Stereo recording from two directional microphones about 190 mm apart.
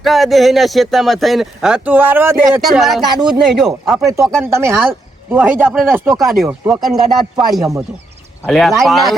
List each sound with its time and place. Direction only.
0.0 s speech: centre (ahead or behind)
3.1 s speech: 25° right (ahead or behind)
3.4 s speech: centre (ahead or behind)
4.4 s speech: 15° right (ahead or behind)
6.1 s speech: centre (ahead or behind)